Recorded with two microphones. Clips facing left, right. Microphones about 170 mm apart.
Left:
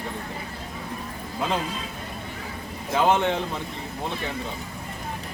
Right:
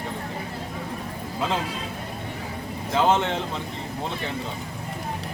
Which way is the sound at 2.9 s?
15° left (ahead or behind).